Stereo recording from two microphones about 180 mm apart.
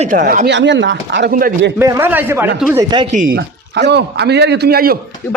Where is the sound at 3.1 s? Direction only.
45° right (ahead or behind).